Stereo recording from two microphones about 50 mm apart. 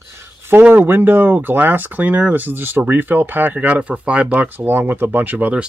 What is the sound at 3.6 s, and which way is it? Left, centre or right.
Speech, right.